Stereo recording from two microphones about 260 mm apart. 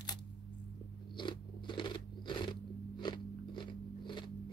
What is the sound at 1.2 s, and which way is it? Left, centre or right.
Biting, centre.